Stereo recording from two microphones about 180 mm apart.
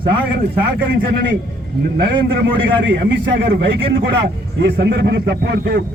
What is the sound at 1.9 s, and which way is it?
A man's voice, 70° right (ahead or behind).